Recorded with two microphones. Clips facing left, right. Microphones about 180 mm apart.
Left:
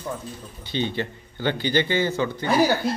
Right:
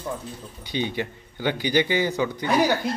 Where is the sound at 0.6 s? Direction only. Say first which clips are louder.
Left 1 dB; 10° right (ahead or behind).